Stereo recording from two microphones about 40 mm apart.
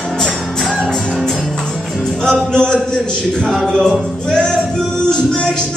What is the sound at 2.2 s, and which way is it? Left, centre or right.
Music, centre.